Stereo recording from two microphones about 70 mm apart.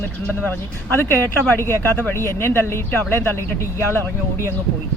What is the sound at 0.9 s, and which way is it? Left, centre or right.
Speech, left.